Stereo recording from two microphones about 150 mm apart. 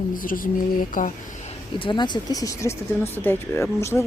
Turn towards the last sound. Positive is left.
turn(degrees=20)  # may be behind; listen again after turning